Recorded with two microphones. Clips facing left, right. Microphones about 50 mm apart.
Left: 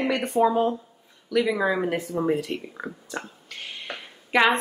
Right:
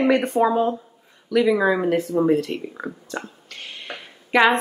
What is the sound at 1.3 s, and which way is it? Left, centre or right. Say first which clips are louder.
Speech: right 5 dB; centre.